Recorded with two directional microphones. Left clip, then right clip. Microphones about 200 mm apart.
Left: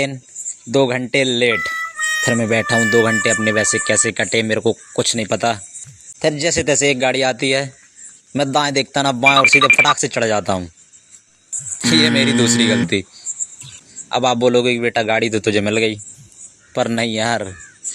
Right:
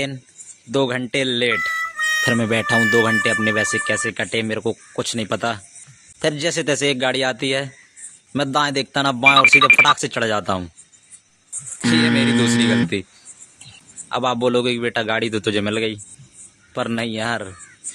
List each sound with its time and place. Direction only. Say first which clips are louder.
0.7 s a man's voice: left 4 dB; 15° left (ahead or behind)
1.6 s a sound: even; centre (ahead or behind)
2.8 s speech: left 1 dB; centre (ahead or behind)
3.1 s a man's voice: left 2 dB; 15° left (ahead or behind)
9.3 s speech: even; centre (ahead or behind)
9.9 s a man's voice: left 3 dB; 15° left (ahead or behind)
11.8 s speech: left 3 dB; 5° right (ahead or behind)
14.0 s a man's voice: left 4 dB; 15° left (ahead or behind)